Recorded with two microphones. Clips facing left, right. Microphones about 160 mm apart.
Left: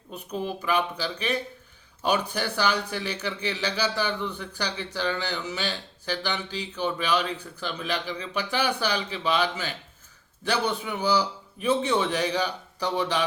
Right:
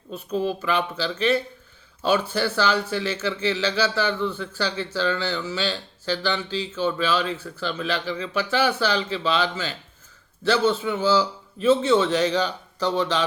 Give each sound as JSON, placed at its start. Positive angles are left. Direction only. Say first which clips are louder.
{"t": 0.1, "sound": "a man's voice", "louder": "right 6 dB", "side_deg": 15}